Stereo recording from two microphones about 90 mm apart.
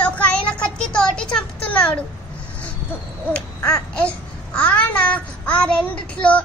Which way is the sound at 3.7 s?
15° left (ahead or behind).